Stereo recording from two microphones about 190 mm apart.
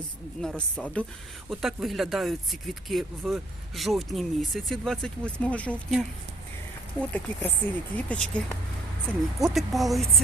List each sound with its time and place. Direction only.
0.4 s speech: 5° left (ahead or behind)
7.1 s speech: 10° left (ahead or behind)